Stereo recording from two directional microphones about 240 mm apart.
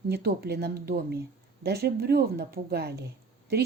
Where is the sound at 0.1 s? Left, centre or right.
Right.